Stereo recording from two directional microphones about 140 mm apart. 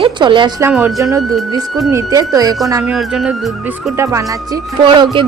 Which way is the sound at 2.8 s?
5° right (ahead or behind).